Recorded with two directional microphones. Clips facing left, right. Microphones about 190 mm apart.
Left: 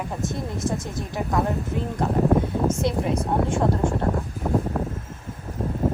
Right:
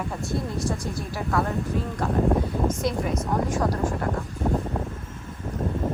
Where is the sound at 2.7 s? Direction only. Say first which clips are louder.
Left 2 dB; 25° left (ahead or behind).